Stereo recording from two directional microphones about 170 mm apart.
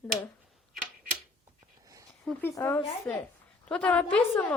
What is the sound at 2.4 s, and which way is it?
A woman's voice, 15° left (ahead or behind).